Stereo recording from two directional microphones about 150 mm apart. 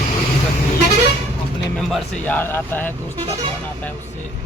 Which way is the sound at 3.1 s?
35° right (ahead or behind).